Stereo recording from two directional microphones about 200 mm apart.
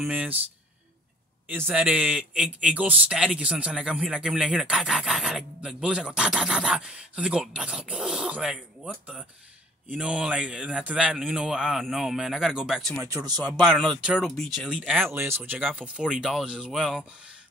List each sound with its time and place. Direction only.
0.0 s speech: 5° right (ahead or behind)
1.5 s a man's voice: 10° right (ahead or behind)
13.0 s speech: 15° right (ahead or behind)
13.4 s a man's voice: centre (ahead or behind)